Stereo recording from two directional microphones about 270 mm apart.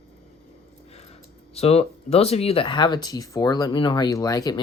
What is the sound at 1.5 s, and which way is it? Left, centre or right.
Speech, left.